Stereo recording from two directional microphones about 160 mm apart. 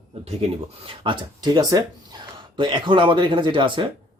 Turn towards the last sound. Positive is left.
turn(degrees=-30)  # may be behind; listen again after turning